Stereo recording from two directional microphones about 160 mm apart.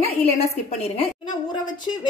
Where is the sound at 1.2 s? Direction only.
30° left (ahead or behind).